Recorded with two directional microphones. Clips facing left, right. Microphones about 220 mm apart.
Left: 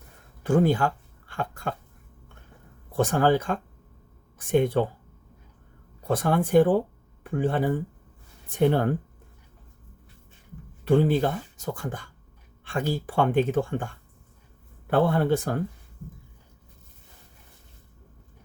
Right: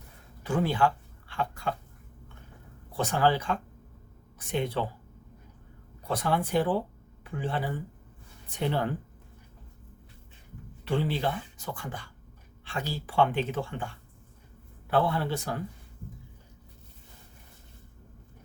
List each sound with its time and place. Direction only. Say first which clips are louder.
0.4 s speech: left 5 dB; 45° left (ahead or behind)
2.9 s speech: left 5 dB; 50° left (ahead or behind)
6.1 s speech: left 5 dB; 50° left (ahead or behind)
10.8 s speech: left 8 dB; 50° left (ahead or behind)